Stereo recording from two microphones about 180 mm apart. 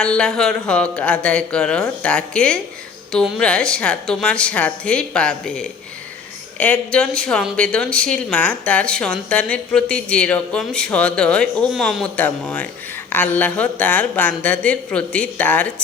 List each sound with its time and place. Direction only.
0.0 s speech: 5° left (ahead or behind)